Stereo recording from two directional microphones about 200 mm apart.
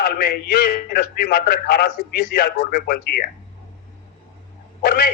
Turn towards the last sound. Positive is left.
turn(degrees=50)  # may be behind; listen again after turning